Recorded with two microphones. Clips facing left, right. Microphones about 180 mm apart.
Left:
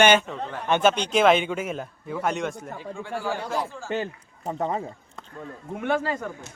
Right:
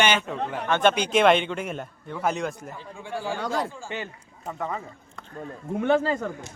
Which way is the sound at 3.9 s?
40° left (ahead or behind).